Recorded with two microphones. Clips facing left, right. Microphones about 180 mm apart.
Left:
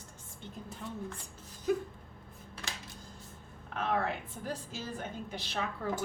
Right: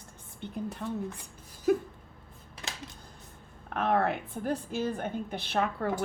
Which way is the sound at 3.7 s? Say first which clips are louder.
Right 5 dB; 60° right (ahead or behind).